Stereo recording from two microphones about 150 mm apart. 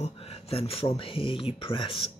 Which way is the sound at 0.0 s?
40° left (ahead or behind).